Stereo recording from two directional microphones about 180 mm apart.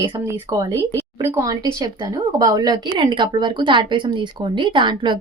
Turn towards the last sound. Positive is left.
turn(degrees=-25)  # may be behind; listen again after turning